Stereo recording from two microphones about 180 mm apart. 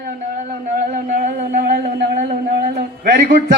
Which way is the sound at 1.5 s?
60° right (ahead or behind).